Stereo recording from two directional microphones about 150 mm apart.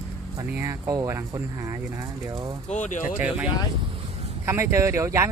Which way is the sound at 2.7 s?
55° left (ahead or behind).